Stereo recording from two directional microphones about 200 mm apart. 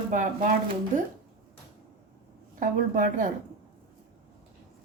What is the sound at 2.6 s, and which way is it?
Speech, 40° right (ahead or behind).